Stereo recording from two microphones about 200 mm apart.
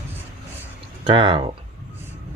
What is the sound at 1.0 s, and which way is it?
Speech, 25° right (ahead or behind).